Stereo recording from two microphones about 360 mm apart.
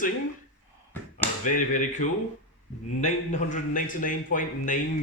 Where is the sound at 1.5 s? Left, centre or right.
Left.